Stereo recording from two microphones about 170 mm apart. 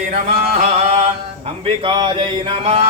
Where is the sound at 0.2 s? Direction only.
40° right (ahead or behind).